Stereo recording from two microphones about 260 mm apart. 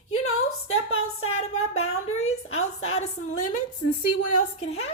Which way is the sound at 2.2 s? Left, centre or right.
Left.